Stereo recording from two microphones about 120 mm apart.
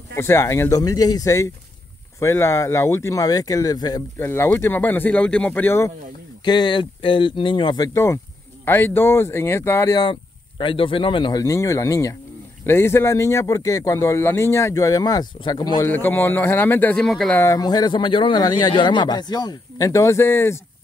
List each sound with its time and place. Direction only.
0.1 s a man's voice: 20° left (ahead or behind)
4.2 s speech: 20° left (ahead or behind)
6.4 s speech: 40° left (ahead or behind)
7.9 s a man's voice: 25° left (ahead or behind)
10.6 s speech: 45° left (ahead or behind)
11.4 s a man's voice: 25° left (ahead or behind)
15.8 s speech: 15° left (ahead or behind)
17.0 s speech: 5° left (ahead or behind)
17.4 s speech: 30° left (ahead or behind)